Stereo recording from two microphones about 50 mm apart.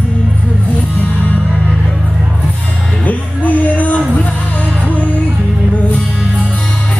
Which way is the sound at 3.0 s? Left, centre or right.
Left.